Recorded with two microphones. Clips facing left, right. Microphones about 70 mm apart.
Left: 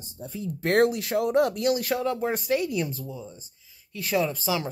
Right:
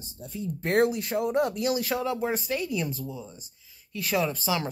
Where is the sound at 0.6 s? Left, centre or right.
Left.